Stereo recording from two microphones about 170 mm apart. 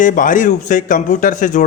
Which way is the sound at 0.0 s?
50° left (ahead or behind).